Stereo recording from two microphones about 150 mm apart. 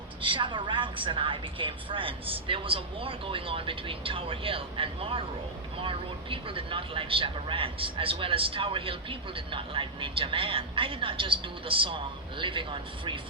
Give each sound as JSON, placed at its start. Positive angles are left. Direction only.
{"t": 0.2, "sound": "speech", "side_deg": -35}